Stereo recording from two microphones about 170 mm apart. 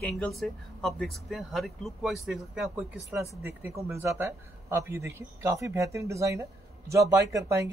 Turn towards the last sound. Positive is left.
turn(degrees=-20)  # may be behind; listen again after turning